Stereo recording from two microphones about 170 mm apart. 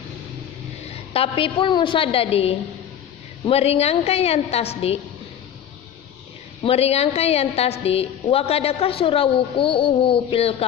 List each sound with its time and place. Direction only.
1.1 s a woman's voice: 35° left (ahead or behind)
6.6 s a woman's voice: 35° left (ahead or behind)